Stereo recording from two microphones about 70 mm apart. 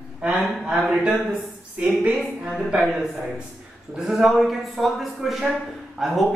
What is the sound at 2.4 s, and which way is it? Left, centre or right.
Speech, centre.